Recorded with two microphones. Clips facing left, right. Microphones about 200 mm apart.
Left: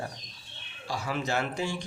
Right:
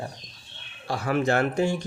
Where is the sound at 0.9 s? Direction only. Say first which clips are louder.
Right 7 dB; 60° right (ahead or behind).